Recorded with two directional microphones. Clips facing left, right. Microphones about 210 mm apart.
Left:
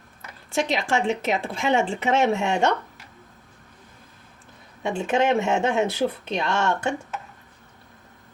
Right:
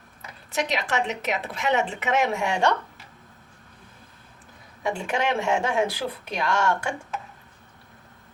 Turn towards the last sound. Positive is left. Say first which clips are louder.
# left 1 dB
turn(degrees=25)  # may be behind; listen again after turning